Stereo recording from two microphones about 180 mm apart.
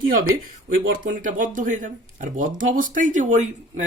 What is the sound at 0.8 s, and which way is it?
Speech, 50° right (ahead or behind).